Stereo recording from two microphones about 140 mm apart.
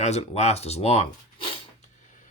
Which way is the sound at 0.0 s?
50° left (ahead or behind).